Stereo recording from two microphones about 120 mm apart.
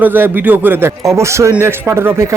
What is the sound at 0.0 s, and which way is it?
Speech, 15° right (ahead or behind).